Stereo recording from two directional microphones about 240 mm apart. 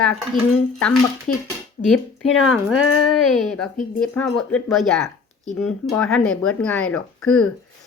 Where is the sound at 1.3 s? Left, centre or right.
Left.